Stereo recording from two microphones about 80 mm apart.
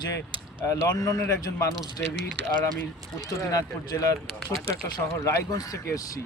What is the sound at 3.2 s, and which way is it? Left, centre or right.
Speech, left.